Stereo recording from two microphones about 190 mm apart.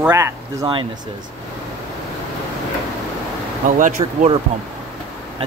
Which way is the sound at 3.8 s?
40° right (ahead or behind).